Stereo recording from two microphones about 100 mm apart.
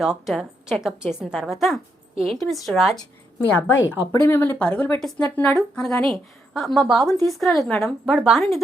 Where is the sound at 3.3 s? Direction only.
15° left (ahead or behind).